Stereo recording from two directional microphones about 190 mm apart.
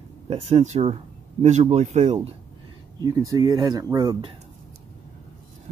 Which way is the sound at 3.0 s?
20° right (ahead or behind).